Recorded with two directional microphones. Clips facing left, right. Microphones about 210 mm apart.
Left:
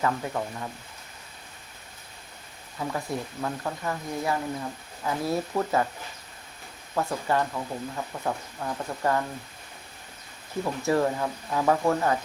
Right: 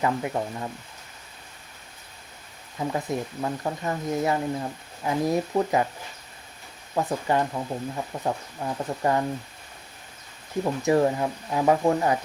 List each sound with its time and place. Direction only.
0.0 s speech: 20° right (ahead or behind)
2.7 s speech: 20° right (ahead or behind)
6.9 s speech: 15° right (ahead or behind)
10.6 s speech: 20° right (ahead or behind)